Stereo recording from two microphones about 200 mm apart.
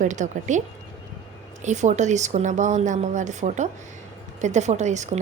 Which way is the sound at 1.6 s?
35° right (ahead or behind).